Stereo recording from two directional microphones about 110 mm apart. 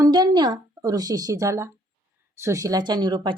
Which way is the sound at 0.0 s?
40° right (ahead or behind).